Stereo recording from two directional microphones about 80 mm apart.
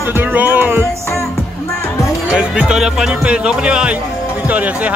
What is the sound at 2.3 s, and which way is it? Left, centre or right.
Speech, centre.